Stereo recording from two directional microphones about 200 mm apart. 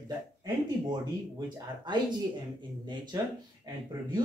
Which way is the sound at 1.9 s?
20° right (ahead or behind).